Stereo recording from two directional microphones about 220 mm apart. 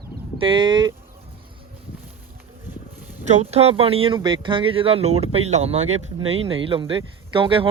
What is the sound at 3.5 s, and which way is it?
Speech, 25° right (ahead or behind).